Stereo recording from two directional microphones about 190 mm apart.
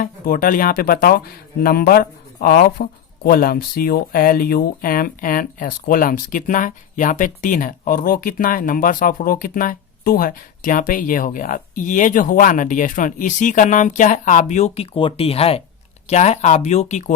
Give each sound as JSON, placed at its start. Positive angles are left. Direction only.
{"t": 0.0, "sound": "speech", "side_deg": 50}